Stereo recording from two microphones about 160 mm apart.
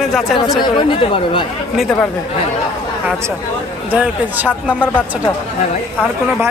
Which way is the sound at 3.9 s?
10° right (ahead or behind).